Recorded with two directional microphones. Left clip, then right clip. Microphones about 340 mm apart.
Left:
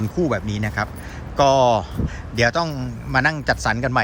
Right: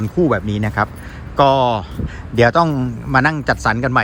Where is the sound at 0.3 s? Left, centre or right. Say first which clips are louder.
Right 5 dB; centre.